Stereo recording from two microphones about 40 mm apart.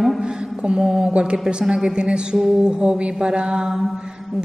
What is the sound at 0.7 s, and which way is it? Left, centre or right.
A woman's voice, centre.